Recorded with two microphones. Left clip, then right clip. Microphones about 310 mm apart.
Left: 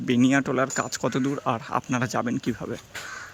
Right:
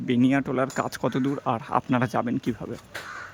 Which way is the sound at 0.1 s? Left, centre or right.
Centre.